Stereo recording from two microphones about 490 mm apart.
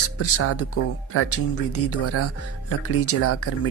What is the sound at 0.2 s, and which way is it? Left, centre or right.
Speech, left.